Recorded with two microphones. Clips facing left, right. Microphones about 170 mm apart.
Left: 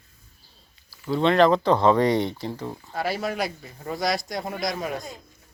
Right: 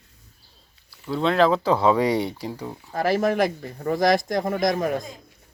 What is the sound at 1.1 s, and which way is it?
Speech, centre (ahead or behind).